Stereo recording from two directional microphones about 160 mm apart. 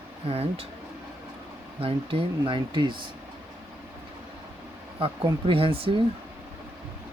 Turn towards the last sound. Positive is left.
turn(degrees=-35)  # may be behind; listen again after turning